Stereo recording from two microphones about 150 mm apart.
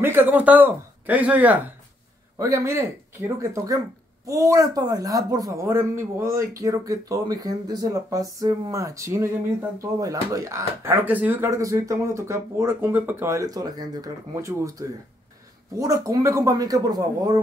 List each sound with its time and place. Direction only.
0.0 s speech: 15° right (ahead or behind)